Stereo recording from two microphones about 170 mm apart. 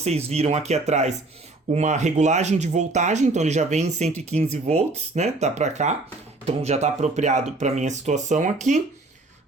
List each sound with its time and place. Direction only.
0.0 s speech: 40° right (ahead or behind)